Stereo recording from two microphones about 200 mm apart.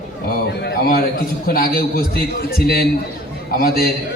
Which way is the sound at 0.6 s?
50° left (ahead or behind).